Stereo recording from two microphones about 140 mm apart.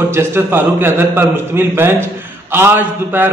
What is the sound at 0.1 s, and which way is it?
A man's voice, 20° right (ahead or behind).